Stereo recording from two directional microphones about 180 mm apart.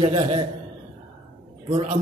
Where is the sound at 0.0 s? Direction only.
35° right (ahead or behind).